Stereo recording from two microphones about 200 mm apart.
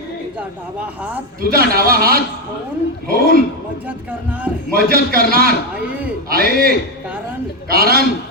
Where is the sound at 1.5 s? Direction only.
50° right (ahead or behind).